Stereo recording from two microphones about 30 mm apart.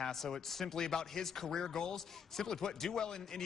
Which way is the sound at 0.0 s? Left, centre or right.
Centre.